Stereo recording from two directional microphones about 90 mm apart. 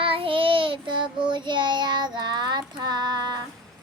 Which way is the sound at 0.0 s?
85° right.